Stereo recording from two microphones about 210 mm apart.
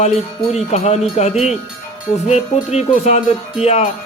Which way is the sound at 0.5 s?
30° left (ahead or behind).